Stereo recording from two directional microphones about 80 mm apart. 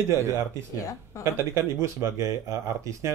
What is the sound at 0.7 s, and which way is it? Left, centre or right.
Speech, left.